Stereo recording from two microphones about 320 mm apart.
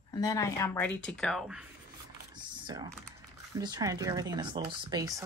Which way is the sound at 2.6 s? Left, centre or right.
Centre.